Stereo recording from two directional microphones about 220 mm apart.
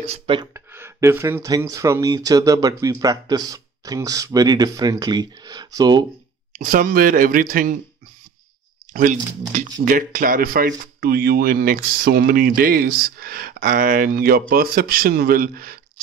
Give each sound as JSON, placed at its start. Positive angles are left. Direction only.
{"t": 0.3, "sound": "speech", "side_deg": -25}
{"t": 0.7, "sound": "speech", "side_deg": -10}
{"t": 6.6, "sound": "speech", "side_deg": -40}
{"t": 8.9, "sound": "speech", "side_deg": -35}